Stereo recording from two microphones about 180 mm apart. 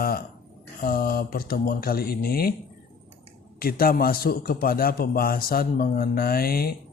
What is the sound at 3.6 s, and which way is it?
Speech, 55° left (ahead or behind).